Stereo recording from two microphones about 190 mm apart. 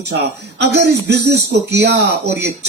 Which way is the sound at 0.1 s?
60° right (ahead or behind).